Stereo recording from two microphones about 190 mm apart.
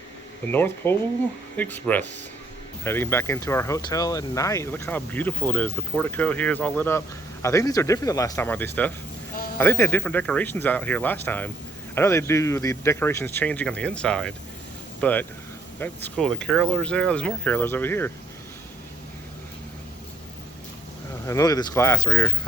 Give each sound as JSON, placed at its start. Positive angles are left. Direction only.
{"t": 0.5, "sound": "speech", "side_deg": 10}
{"t": 21.2, "sound": "speech", "side_deg": 20}